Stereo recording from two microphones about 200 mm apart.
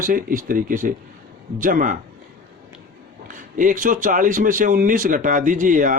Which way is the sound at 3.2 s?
40° right (ahead or behind).